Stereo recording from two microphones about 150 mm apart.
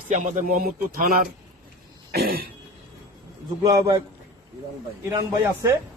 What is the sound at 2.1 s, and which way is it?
Throat clearing, 85° right.